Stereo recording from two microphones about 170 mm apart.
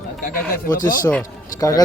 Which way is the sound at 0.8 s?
55° left (ahead or behind).